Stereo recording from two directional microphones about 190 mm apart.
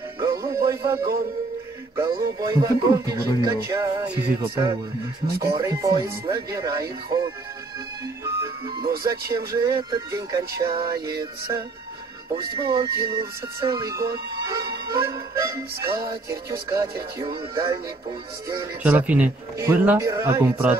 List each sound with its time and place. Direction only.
0.2 s music: 15° right (ahead or behind)
2.0 s speech: 15° right (ahead or behind)
5.5 s speech: 15° right (ahead or behind)